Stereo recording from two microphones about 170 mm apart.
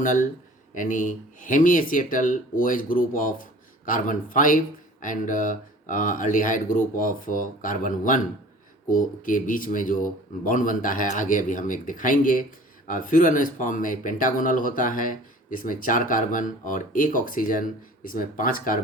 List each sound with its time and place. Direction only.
0.0 s speech: 50° left (ahead or behind)